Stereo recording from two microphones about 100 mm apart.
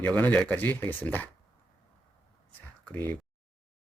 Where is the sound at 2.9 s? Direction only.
15° left (ahead or behind).